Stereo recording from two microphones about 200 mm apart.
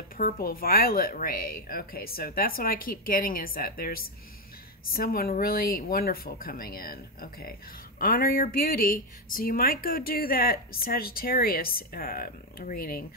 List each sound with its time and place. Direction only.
0.2 s speech: 45° left (ahead or behind)